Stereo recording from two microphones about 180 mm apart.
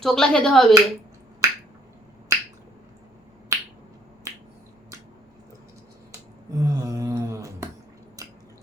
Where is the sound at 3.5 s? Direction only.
15° right (ahead or behind).